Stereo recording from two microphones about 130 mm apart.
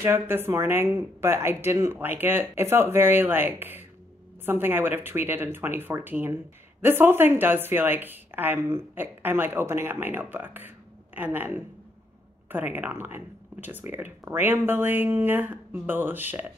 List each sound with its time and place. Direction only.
0.0 s speech: 20° right (ahead or behind)